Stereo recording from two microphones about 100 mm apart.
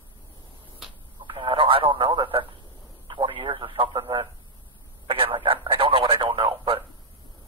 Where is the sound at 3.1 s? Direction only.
60° right (ahead or behind).